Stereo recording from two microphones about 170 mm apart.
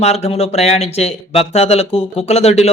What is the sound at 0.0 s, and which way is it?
Speech, 40° left (ahead or behind).